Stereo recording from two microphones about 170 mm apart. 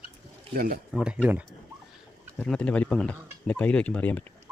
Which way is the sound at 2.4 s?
5° left (ahead or behind).